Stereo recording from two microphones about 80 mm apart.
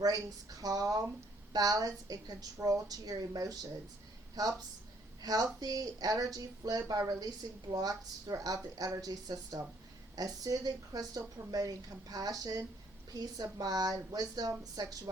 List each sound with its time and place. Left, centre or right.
0.0 s a woman's voice: right